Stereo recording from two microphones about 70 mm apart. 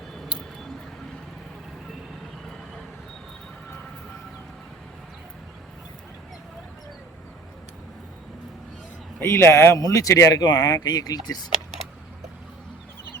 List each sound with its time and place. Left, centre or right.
0.1 s a sound: centre
9.2 s a man's voice: left
9.8 s a man's voice: left
10.4 s speech: left